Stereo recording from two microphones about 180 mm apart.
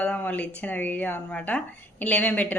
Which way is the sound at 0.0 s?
10° left (ahead or behind).